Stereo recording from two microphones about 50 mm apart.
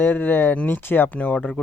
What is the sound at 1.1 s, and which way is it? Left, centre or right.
Speech, left.